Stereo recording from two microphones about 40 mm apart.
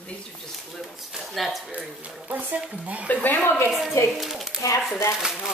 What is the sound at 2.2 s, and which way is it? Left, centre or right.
Speech, right.